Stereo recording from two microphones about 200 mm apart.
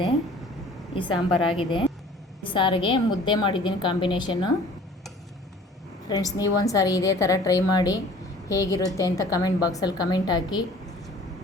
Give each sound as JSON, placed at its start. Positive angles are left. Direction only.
{"t": 0.9, "sound": "a woman's voice", "side_deg": 25}
{"t": 6.1, "sound": "a woman's voice", "side_deg": 20}